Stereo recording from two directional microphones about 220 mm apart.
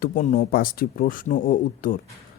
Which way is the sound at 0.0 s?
35° left (ahead or behind).